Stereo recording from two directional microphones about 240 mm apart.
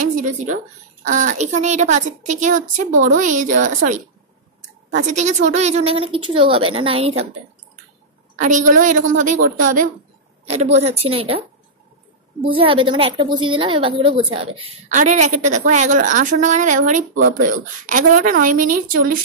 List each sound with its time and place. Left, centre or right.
0.0 s a woman's voice: right
8.4 s a woman's voice: right